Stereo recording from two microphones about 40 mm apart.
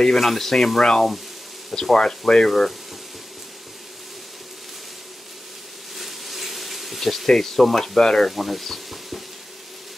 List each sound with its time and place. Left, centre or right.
0.0 s speech: centre
5.9 s a sound: centre
8.3 s speech: centre